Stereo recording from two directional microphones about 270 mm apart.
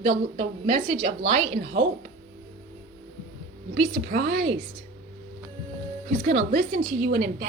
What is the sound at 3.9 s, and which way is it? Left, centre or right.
Speech, right.